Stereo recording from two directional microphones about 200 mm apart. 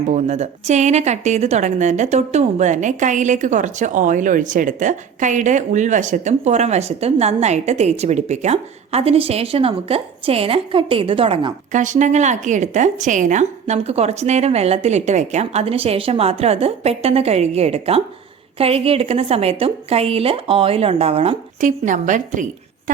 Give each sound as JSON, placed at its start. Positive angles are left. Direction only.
{"t": 0.1, "sound": "a woman's voice", "side_deg": -35}